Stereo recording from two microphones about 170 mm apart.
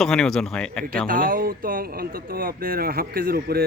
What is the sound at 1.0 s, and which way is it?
Speech, 55° right (ahead or behind).